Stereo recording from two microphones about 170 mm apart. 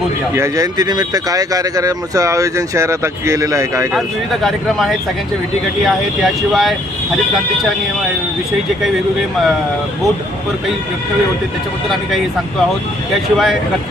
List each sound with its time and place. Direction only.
0.3 s speech: 20° right (ahead or behind)
3.9 s speech: centre (ahead or behind)
13.3 s speech: centre (ahead or behind)